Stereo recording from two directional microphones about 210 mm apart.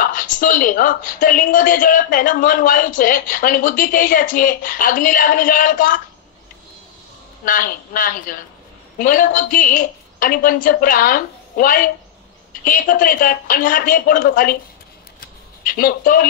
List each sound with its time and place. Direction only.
0.0 s a woman's voice: 40° left (ahead or behind)
7.4 s a woman's voice: 45° left (ahead or behind)
15.6 s speech: 45° left (ahead or behind)